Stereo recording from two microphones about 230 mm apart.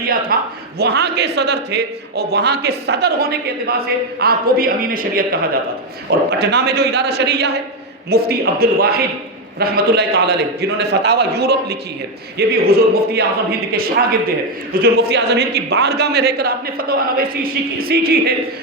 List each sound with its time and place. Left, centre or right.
0.0 s a man's voice: right